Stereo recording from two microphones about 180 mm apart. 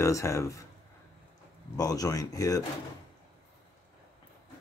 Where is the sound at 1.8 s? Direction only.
20° left (ahead or behind).